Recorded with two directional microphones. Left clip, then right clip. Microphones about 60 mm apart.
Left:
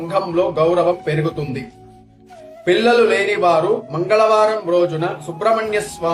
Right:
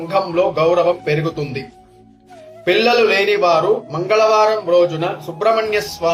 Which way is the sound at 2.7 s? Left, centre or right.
Centre.